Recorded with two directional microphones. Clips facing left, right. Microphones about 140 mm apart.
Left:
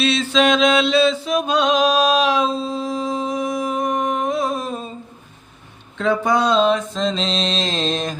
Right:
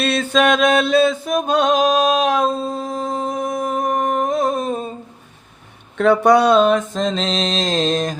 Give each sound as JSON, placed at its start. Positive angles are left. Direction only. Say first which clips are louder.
{"t": 0.0, "sound": "mantra", "louder": "right 1 dB", "side_deg": -55}
{"t": 6.0, "sound": "a sound", "louder": "right 5 dB", "side_deg": -70}
{"t": 6.9, "sound": "mantra", "louder": "right 1 dB", "side_deg": -50}